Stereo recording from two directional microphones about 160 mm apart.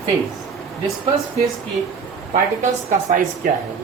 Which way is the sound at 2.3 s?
50° right (ahead or behind).